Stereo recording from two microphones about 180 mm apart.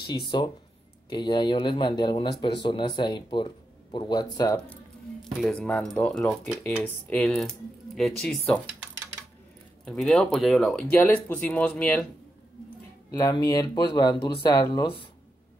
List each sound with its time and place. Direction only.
0.3 s speech: 25° left (ahead or behind)
5.2 s speech: 5° left (ahead or behind)
9.8 s speech: centre (ahead or behind)
13.1 s speech: 20° left (ahead or behind)